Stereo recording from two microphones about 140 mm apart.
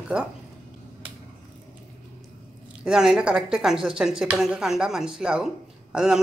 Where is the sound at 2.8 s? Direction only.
5° right (ahead or behind).